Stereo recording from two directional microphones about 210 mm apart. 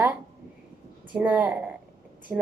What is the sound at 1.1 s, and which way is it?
A woman's voice, 10° right (ahead or behind).